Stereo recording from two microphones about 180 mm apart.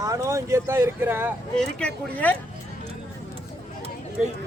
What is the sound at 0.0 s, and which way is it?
Speech, 20° right (ahead or behind).